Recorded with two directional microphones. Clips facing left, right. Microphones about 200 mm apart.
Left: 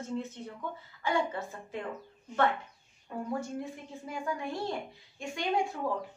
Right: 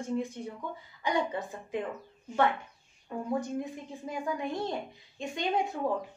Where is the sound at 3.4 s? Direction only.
20° right (ahead or behind).